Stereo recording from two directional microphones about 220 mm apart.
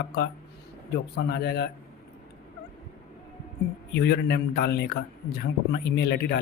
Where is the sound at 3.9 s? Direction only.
45° left (ahead or behind).